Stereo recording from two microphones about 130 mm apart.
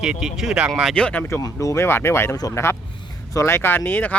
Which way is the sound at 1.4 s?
25° left (ahead or behind).